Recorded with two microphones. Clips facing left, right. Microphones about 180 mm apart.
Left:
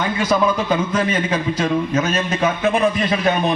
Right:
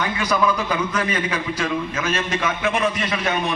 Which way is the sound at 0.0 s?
25° left (ahead or behind).